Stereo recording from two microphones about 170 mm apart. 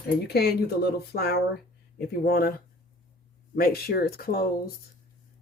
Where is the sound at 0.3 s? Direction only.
70° left (ahead or behind).